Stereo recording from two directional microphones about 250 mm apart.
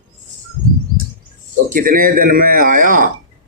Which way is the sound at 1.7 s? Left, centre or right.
Right.